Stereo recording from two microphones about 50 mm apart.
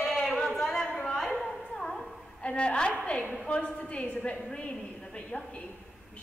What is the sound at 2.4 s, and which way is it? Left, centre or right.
A woman's voice, left.